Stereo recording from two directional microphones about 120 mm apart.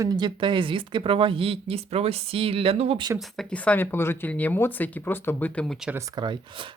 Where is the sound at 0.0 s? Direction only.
35° right (ahead or behind); by 3.0 s 60° right (ahead or behind).